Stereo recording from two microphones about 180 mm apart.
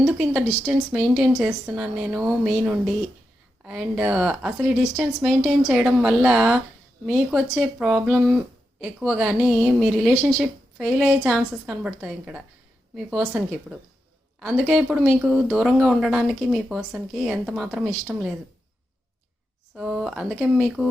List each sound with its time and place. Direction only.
0.0 s speech: 5° right (ahead or behind)
19.7 s speech: 5° right (ahead or behind)